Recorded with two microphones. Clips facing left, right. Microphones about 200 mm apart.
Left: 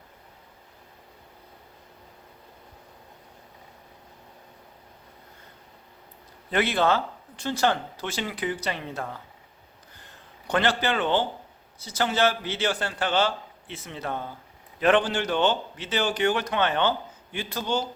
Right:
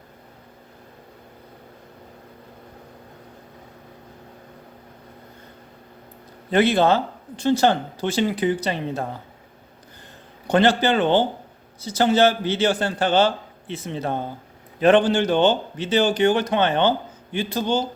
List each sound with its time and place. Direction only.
6.5 s a man's voice: 30° right (ahead or behind)
10.5 s a man's voice: 30° right (ahead or behind)